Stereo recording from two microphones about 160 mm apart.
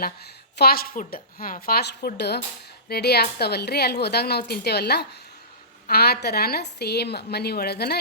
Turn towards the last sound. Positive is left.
turn(degrees=90)